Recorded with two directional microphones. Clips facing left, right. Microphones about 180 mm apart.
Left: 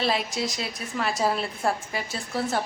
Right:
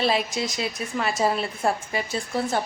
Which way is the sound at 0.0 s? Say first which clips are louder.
Right 2 dB; centre (ahead or behind).